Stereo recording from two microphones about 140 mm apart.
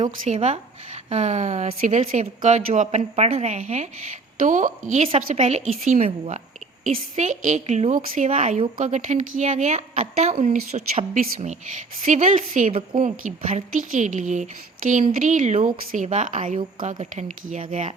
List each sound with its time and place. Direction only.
0.3 s a woman's voice: 50° right (ahead or behind)
4.4 s a woman's voice: 65° right (ahead or behind)
5.0 s a woman's voice: 50° right (ahead or behind)